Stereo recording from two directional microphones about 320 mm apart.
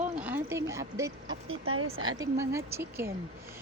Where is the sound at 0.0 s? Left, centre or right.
Centre.